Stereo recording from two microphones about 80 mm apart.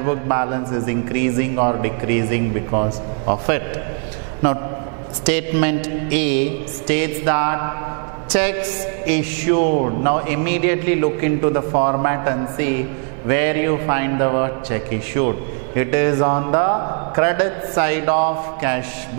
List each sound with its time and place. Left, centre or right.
0.0 s a man's voice: centre
5.2 s a man's voice: centre